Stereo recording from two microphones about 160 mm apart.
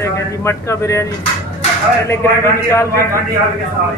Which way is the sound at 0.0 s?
15° left (ahead or behind).